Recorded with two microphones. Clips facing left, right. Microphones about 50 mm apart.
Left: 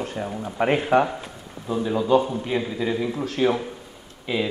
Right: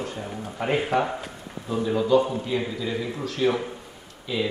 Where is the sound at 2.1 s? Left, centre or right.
Left.